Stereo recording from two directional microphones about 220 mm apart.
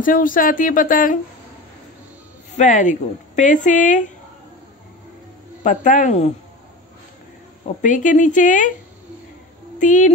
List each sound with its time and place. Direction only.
0.0 s a woman's voice: 40° left (ahead or behind)
2.5 s a woman's voice: 35° left (ahead or behind)
5.6 s a woman's voice: 35° left (ahead or behind)
7.6 s a woman's voice: 35° left (ahead or behind)
9.8 s speech: 35° left (ahead or behind)